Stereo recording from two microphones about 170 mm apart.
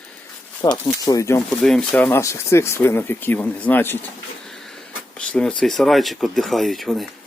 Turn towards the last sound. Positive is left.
turn(degrees=0)  # may be behind; listen again after turning